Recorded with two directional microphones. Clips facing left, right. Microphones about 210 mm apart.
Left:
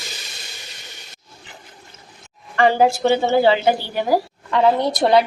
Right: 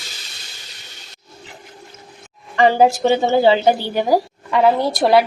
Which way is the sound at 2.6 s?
20° right (ahead or behind).